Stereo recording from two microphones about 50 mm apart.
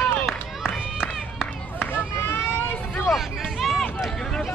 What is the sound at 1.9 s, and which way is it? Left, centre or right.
Run, left.